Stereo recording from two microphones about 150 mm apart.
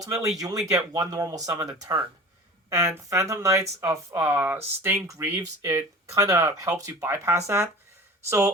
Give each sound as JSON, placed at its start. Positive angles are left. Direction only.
{"t": 0.0, "sound": "speech", "side_deg": -25}